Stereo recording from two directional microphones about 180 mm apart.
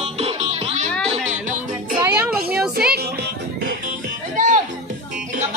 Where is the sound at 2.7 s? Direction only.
60° right (ahead or behind).